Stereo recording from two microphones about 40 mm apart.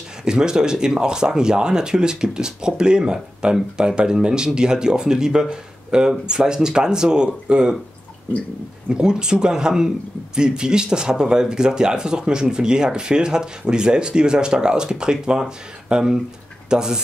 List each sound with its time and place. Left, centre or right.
0.2 s speech: centre
8.8 s speech: right